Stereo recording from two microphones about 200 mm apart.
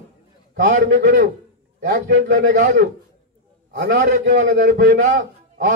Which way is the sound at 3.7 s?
55° right (ahead or behind).